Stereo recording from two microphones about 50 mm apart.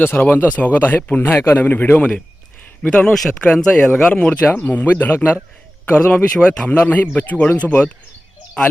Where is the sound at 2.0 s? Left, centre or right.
Left.